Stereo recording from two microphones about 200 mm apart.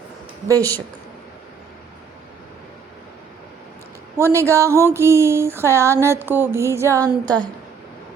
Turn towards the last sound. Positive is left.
turn(degrees=5)  # may be behind; listen again after turning